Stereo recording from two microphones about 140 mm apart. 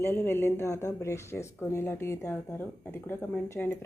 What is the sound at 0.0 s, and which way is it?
Speech, 15° left (ahead or behind).